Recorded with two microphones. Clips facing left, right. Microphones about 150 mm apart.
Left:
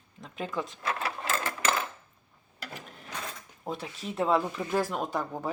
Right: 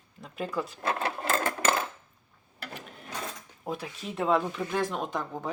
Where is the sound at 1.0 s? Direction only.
45° right (ahead or behind).